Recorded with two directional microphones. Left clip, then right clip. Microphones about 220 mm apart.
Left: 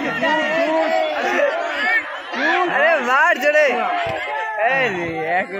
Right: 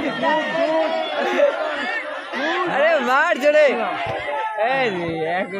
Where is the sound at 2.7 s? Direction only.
40° right (ahead or behind).